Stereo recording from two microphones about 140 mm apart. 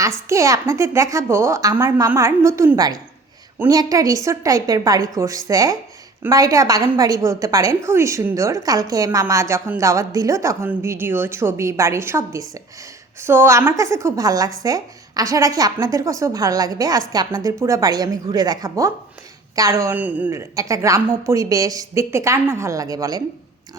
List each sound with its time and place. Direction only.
0.0 s a woman's voice: 20° right (ahead or behind)
20.6 s a woman's voice: 20° right (ahead or behind)